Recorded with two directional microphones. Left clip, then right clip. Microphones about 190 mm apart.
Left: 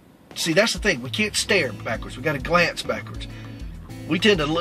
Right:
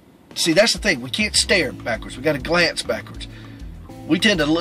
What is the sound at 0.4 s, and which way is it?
Speech, 15° right (ahead or behind).